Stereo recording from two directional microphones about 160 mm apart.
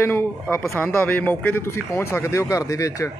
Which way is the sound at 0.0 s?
15° left (ahead or behind).